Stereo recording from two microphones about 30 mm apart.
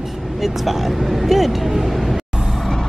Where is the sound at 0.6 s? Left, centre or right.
Centre.